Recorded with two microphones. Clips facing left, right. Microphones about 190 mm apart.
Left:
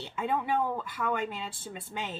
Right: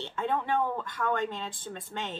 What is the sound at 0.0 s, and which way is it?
Speech, 10° left (ahead or behind).